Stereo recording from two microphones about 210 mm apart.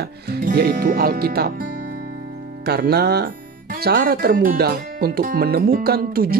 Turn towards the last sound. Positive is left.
turn(degrees=-45)  # may be behind; listen again after turning